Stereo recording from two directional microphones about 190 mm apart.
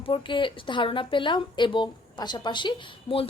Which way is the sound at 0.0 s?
25° left (ahead or behind).